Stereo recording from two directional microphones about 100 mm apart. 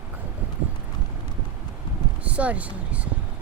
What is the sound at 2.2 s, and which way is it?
Speech, 15° right (ahead or behind).